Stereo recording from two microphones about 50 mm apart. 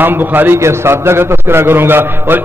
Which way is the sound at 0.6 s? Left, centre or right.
Right.